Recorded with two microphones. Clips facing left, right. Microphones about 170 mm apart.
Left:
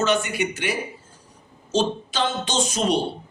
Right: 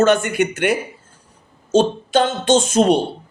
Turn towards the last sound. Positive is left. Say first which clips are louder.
# right 8 dB
turn(degrees=-50)  # may be behind; listen again after turning